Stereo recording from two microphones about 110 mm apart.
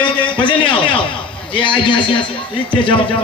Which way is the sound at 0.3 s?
45° left (ahead or behind).